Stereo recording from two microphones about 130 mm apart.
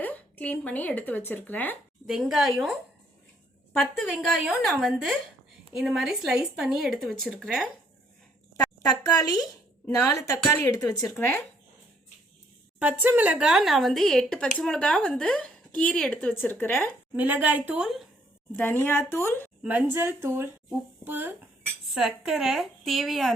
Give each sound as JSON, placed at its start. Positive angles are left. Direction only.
{"t": 0.0, "sound": "speech", "side_deg": 15}
{"t": 2.0, "sound": "speech", "side_deg": -5}
{"t": 3.8, "sound": "speech", "side_deg": 0}
{"t": 8.9, "sound": "a woman's voice", "side_deg": 30}
{"t": 13.0, "sound": "speech", "side_deg": -15}
{"t": 17.2, "sound": "speech", "side_deg": -15}
{"t": 18.5, "sound": "speech", "side_deg": 15}
{"t": 19.6, "sound": "speech", "side_deg": -15}
{"t": 21.9, "sound": "speech", "side_deg": -5}